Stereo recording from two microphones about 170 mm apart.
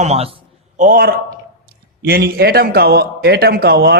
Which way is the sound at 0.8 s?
55° right (ahead or behind).